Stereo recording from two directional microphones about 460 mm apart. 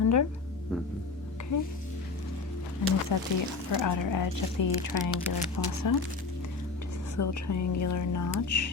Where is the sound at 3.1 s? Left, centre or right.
Left.